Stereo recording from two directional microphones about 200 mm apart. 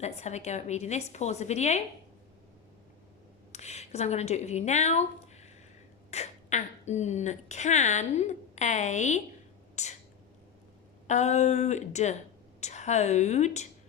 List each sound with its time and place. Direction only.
0.0 s speech: 35° left (ahead or behind)
3.5 s a woman's voice: 35° left (ahead or behind)
11.0 s speech: 35° left (ahead or behind)